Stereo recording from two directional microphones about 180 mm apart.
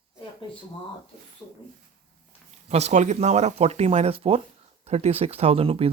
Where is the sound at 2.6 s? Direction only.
35° right (ahead or behind).